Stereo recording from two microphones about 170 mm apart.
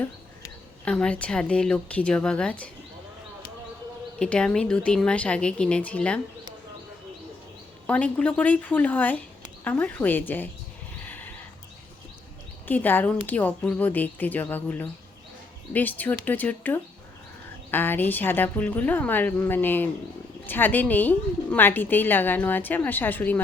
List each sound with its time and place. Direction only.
0.9 s a woman's voice: 5° left (ahead or behind)
4.2 s a woman's voice: 5° left (ahead or behind)
7.9 s a woman's voice: 10° left (ahead or behind)
11.0 s horse: 10° left (ahead or behind)
12.6 s a woman's voice: 10° left (ahead or behind)